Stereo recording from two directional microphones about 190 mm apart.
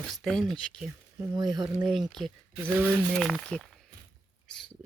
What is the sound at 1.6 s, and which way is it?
Speech, 5° right (ahead or behind).